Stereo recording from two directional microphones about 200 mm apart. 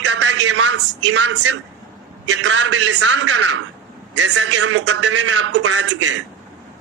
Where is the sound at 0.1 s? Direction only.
65° right (ahead or behind).